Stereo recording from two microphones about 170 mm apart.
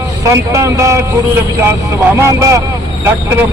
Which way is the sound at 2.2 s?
20° right (ahead or behind).